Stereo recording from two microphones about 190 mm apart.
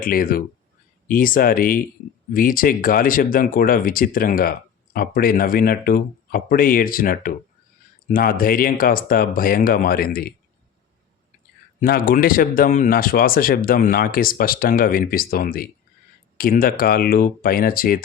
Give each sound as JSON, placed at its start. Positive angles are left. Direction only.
{"t": 0.0, "sound": "speech", "side_deg": 50}
{"t": 11.8, "sound": "speech", "side_deg": 50}